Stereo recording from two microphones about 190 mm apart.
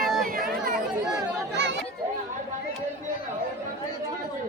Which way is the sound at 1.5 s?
65° right (ahead or behind).